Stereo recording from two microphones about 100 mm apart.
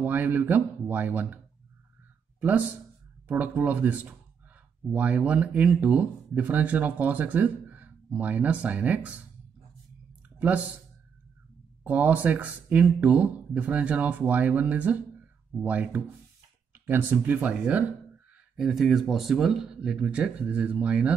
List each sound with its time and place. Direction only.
0.0 s speech: 20° right (ahead or behind)
3.3 s speech: 15° right (ahead or behind)
11.8 s speech: 15° right (ahead or behind)
18.6 s speech: centre (ahead or behind)